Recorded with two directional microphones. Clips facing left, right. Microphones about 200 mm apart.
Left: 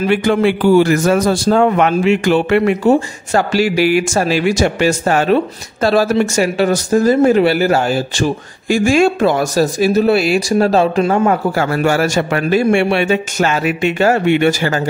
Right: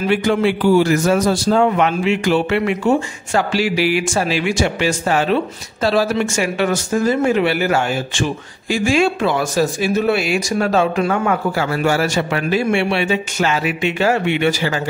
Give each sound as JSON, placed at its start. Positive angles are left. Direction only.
{"t": 0.1, "sound": "a man's voice", "side_deg": 55}
{"t": 11.5, "sound": "a man's voice", "side_deg": 50}